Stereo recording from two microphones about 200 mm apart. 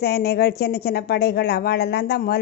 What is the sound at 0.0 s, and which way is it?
A woman's voice, 55° left (ahead or behind).